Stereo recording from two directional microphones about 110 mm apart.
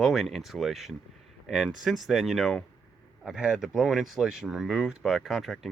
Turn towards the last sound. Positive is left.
turn(degrees=0)  # may be behind; listen again after turning